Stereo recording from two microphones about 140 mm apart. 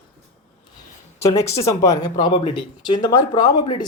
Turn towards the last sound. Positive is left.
turn(degrees=25)  # may be behind; listen again after turning